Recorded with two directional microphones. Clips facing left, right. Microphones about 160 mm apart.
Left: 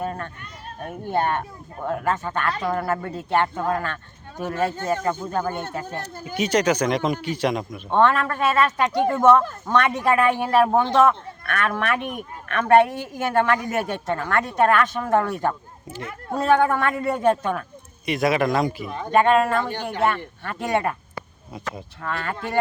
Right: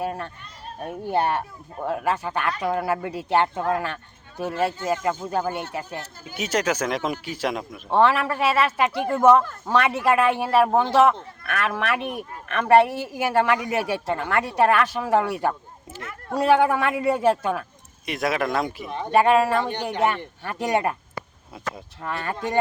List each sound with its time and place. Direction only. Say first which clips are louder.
0.0 s speech: even; 10° right (ahead or behind)
18.9 s speech: right 1 dB; 20° right (ahead or behind)
19.1 s speech: even; 10° right (ahead or behind)
22.0 s speech: right 1 dB; 20° right (ahead or behind)